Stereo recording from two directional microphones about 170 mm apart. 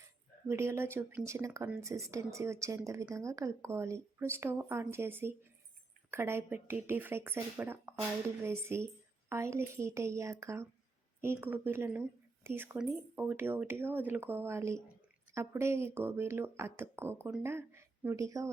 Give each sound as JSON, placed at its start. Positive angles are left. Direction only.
{"t": 0.4, "sound": "speech", "side_deg": -15}